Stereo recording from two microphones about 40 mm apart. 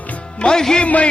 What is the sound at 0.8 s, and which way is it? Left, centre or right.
Music, left.